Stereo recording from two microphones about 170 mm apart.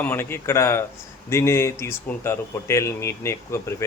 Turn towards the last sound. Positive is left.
turn(degrees=15)  # may be behind; listen again after turning